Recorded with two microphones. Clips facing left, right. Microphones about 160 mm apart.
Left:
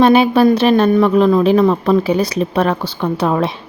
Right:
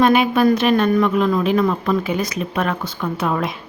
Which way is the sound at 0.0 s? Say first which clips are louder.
Left 4 dB; 30° left (ahead or behind).